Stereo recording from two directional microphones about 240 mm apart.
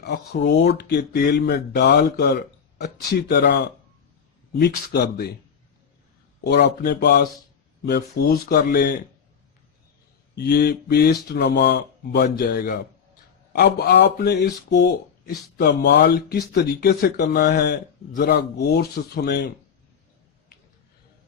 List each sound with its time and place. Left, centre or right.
0.0 s speech: left
4.6 s speech: left
6.4 s speech: left
10.3 s speech: left